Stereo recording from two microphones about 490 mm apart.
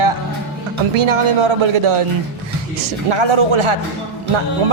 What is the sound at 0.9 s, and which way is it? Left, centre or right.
Speech, right.